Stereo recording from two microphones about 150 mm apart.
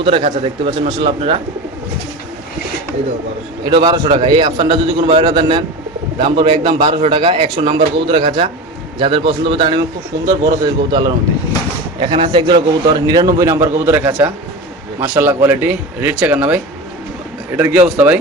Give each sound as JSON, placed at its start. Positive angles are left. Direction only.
{"t": 0.0, "sound": "a man's voice", "side_deg": -40}
{"t": 3.7, "sound": "a man's voice", "side_deg": -30}
{"t": 17.6, "sound": "speech", "side_deg": -10}